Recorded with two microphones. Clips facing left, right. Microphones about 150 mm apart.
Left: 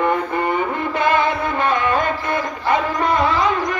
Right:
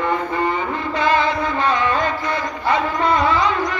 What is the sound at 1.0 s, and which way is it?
Music, 55° left (ahead or behind).